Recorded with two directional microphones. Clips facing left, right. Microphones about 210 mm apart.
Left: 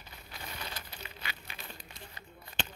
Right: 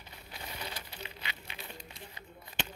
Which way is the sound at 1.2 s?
20° right (ahead or behind).